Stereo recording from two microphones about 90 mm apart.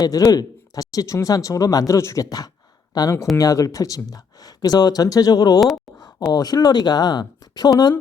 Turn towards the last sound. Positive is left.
turn(degrees=50)  # may be behind; listen again after turning